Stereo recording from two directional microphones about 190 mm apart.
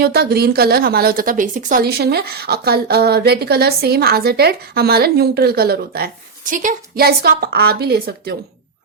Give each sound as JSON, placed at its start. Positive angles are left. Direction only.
{"t": 0.0, "sound": "a woman's voice", "side_deg": -55}